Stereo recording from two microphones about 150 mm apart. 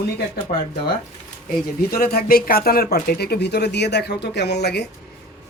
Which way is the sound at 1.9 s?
90° left.